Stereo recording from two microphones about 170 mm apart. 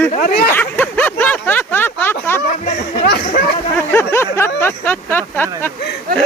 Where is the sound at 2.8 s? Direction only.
80° left.